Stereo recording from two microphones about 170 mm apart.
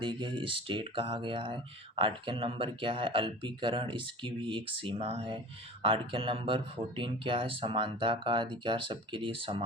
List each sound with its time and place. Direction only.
0.0 s speech: 25° right (ahead or behind)